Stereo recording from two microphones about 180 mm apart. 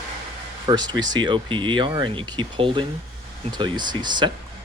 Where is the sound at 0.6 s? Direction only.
25° right (ahead or behind).